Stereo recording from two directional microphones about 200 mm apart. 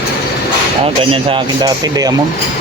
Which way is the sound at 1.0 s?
25° right (ahead or behind).